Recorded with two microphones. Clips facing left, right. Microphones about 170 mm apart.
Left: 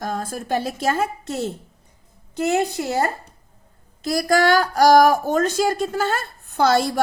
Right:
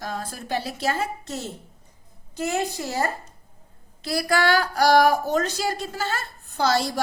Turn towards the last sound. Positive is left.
turn(degrees=55)  # may be behind; listen again after turning